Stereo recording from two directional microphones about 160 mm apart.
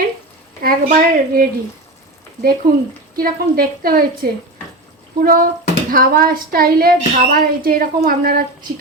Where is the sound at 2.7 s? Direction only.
20° right (ahead or behind).